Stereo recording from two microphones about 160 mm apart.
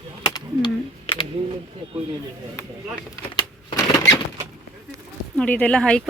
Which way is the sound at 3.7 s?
20° left (ahead or behind).